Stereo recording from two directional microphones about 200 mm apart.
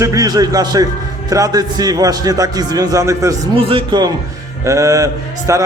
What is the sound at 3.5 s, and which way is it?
A man's voice, 25° right (ahead or behind).